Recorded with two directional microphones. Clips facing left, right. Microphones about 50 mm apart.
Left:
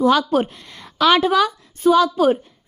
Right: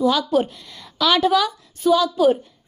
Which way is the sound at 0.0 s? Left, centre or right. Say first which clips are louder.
Left 2 dB; left.